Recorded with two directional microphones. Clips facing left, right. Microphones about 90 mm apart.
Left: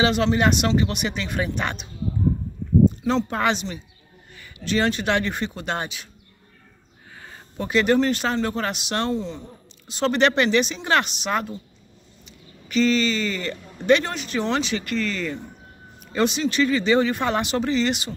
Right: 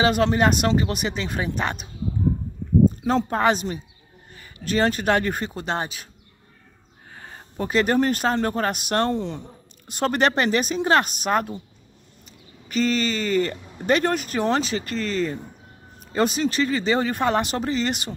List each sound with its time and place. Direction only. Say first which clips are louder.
0.0 s speech: right 1 dB; 45° right (ahead or behind)
7.2 s speech: right 2 dB; 40° right (ahead or behind)